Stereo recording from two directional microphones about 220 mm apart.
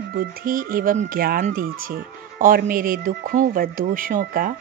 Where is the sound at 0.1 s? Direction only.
45° right (ahead or behind).